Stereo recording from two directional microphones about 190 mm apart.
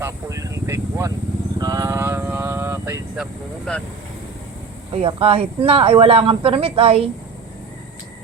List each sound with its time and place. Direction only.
0.0 s vehicle: 15° right (ahead or behind)
3.7 s speech: 5° left (ahead or behind)
4.9 s speech: 30° right (ahead or behind)